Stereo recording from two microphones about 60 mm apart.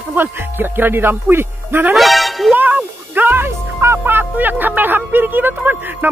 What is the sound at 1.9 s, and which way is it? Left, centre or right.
Speech, centre.